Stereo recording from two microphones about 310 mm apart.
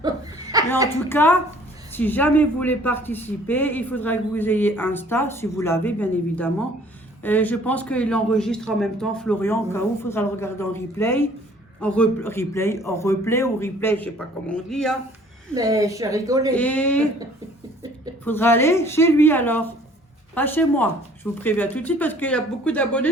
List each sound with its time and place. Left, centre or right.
0.0 s chuckle: centre
1.1 s a man's voice: centre
15.5 s a woman's voice: centre
16.6 s speech: centre
18.3 s a man's voice: centre